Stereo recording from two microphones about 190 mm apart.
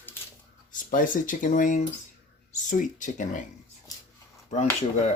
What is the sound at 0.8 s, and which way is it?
Speech, 45° left (ahead or behind).